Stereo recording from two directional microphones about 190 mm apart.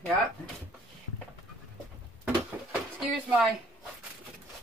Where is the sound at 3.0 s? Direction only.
Centre (ahead or behind).